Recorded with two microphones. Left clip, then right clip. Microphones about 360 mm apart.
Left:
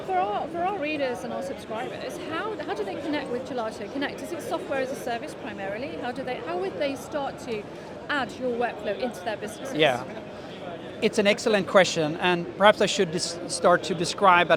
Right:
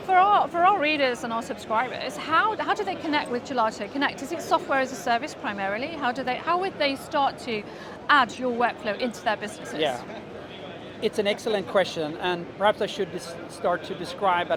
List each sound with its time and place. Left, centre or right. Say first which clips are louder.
0.1 s a sound: right 8 dB; right
1.2 s a woman's voice: right 2 dB; right
9.7 s speech: left 4 dB; left
11.0 s speech: left 3 dB; left